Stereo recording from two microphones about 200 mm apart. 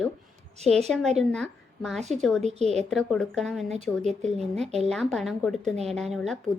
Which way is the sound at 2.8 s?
Centre (ahead or behind).